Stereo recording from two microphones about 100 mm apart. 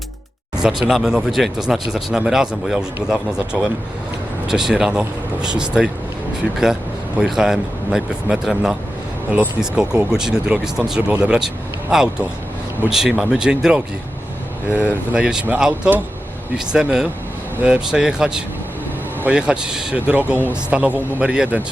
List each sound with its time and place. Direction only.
0.6 s a man's voice: 5° right (ahead or behind)
14.7 s speech: 20° left (ahead or behind)
15.1 s a man's voice: 10° right (ahead or behind)